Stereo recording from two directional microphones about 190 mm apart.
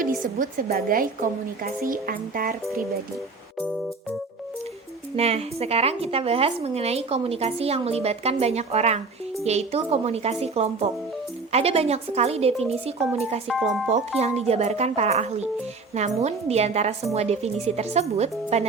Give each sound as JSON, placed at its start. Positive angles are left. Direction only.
{"t": 0.3, "sound": "a woman's voice", "side_deg": -50}
{"t": 5.1, "sound": "a woman's voice", "side_deg": -35}
{"t": 13.5, "sound": "speech", "side_deg": 0}
{"t": 14.2, "sound": "a woman's voice", "side_deg": -35}